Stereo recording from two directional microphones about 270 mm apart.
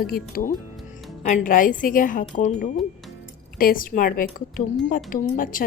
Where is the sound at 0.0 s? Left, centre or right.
Left.